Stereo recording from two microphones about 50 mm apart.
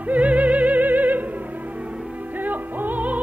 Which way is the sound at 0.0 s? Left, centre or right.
Right.